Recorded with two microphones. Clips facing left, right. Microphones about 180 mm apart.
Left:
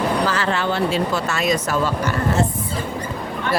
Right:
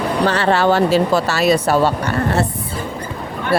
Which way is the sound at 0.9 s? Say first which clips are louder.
Right 6 dB; 35° right (ahead or behind).